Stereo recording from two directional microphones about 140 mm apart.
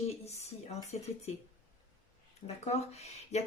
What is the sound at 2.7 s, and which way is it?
Speech, 50° left (ahead or behind).